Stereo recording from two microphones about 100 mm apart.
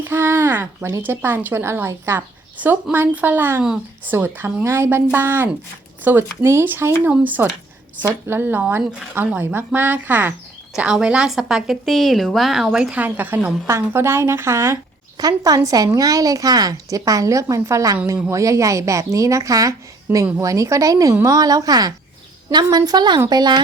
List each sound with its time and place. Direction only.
0.0 s a woman's voice: 25° right (ahead or behind)
10.8 s a woman's voice: 10° right (ahead or behind); by 14.8 s 25° right (ahead or behind)
15.2 s a woman's voice: 40° right (ahead or behind)